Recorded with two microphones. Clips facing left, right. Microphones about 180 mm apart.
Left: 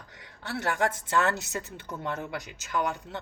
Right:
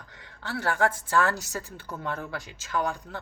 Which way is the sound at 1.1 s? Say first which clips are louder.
Right 1 dB; 20° left (ahead or behind).